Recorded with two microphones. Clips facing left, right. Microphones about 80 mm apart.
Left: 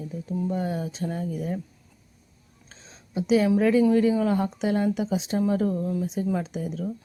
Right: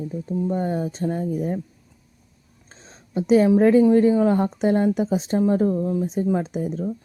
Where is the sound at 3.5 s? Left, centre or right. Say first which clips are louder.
Right 5 dB; right.